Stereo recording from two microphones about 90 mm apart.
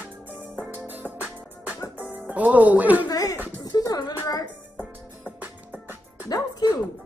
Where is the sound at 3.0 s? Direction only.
45° left (ahead or behind).